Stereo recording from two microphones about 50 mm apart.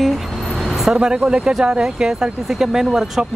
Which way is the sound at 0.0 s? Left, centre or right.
Centre.